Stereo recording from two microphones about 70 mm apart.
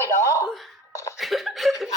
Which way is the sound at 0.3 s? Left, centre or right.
Left.